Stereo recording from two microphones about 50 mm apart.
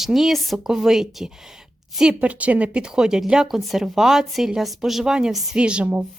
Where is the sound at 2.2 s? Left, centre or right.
Right.